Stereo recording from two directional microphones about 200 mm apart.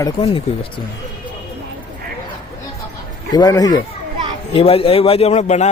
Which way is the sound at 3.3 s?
20° left (ahead or behind).